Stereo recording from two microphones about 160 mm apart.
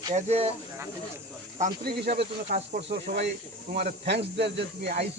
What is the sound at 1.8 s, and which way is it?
Speech, 85° right.